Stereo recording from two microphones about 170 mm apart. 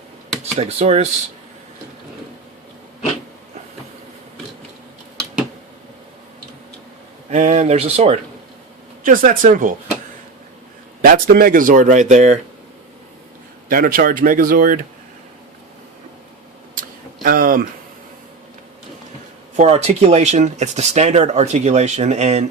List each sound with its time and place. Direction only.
0.5 s speech: 40° right (ahead or behind)
7.3 s speech: 45° right (ahead or behind)
9.0 s speech: 50° right (ahead or behind)
11.0 s speech: 55° right (ahead or behind)
13.7 s speech: 55° right (ahead or behind)
17.2 s a sound: 55° right (ahead or behind)
19.5 s speech: 40° right (ahead or behind)